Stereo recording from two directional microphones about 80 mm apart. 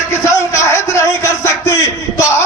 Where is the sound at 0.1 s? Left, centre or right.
Left.